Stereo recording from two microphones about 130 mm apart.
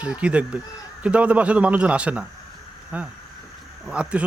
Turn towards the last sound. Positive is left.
turn(degrees=-10)  # may be behind; listen again after turning